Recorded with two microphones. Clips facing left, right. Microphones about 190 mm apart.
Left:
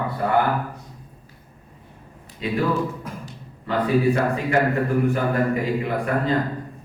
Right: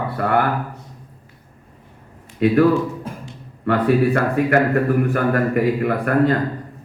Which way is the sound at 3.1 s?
30° right (ahead or behind).